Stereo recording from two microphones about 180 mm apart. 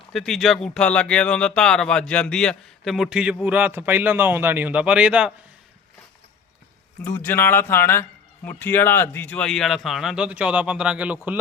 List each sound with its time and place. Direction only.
0.1 s speech: centre (ahead or behind)
7.0 s speech: 10° left (ahead or behind); by 11.3 s 5° right (ahead or behind)